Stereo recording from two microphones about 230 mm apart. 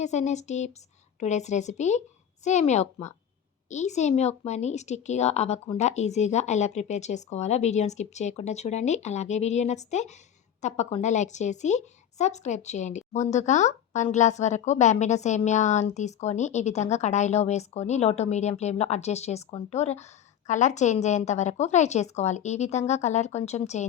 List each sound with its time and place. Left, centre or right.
0.0 s a woman's voice: left